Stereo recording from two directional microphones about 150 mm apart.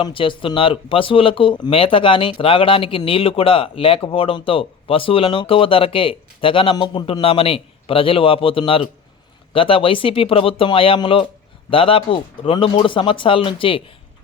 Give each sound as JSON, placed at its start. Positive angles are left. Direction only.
{"t": 0.0, "sound": "speech", "side_deg": 35}